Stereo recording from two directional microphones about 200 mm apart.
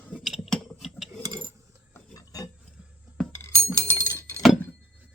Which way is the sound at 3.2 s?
10° left (ahead or behind).